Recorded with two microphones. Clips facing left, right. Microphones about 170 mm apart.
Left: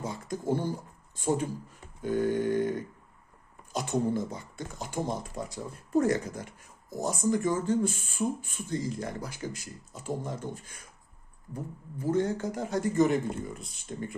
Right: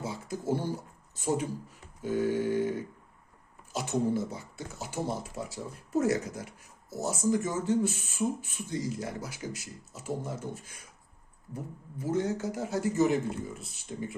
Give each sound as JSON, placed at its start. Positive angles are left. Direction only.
{"t": 0.0, "sound": "speech", "side_deg": -5}
{"t": 2.0, "sound": "a sound", "side_deg": -5}
{"t": 3.7, "sound": "a man's voice", "side_deg": -5}